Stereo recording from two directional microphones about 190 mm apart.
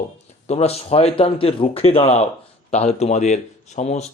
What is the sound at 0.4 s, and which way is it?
A man's voice, 35° left (ahead or behind).